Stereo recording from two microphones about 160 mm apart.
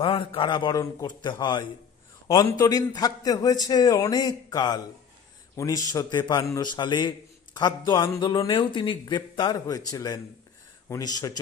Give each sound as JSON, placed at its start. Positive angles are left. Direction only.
{"t": 0.0, "sound": "a man's voice", "side_deg": 35}